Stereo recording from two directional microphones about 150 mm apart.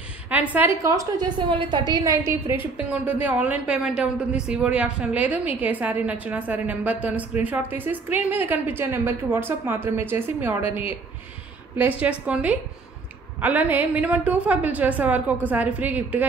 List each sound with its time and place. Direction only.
0.3 s a woman's voice: 10° right (ahead or behind)
0.8 s a woman's voice: 20° right (ahead or behind)
12.0 s a woman's voice: 10° right (ahead or behind)